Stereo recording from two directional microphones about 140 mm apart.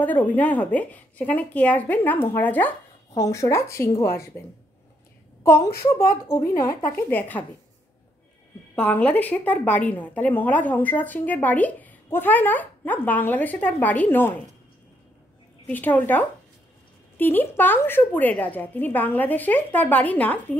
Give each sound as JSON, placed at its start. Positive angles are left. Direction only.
{"t": 0.0, "sound": "a woman's voice", "side_deg": 10}
{"t": 5.4, "sound": "a woman's voice", "side_deg": 20}
{"t": 8.7, "sound": "a woman's voice", "side_deg": 10}
{"t": 15.6, "sound": "a woman's voice", "side_deg": 10}